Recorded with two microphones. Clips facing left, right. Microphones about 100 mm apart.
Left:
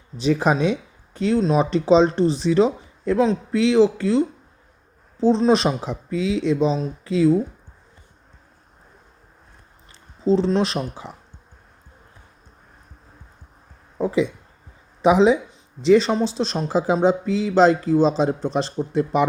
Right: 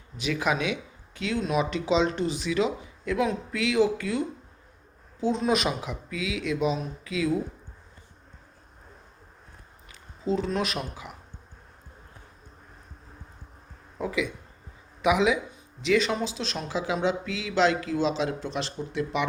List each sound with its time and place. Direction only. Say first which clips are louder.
0.2 s speech: left 8 dB; 35° left (ahead or behind)
5.3 s speech: left 8 dB; 30° left (ahead or behind)
9.9 s speech: left 9 dB; 30° left (ahead or behind)
14.0 s speech: left 8 dB; 30° left (ahead or behind)